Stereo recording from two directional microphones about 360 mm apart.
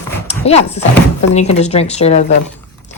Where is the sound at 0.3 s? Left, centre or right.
Centre.